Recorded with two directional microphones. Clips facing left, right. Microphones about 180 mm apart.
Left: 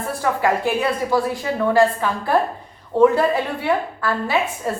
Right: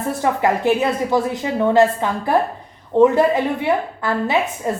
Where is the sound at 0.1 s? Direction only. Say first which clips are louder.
Right 2 dB; 20° right (ahead or behind).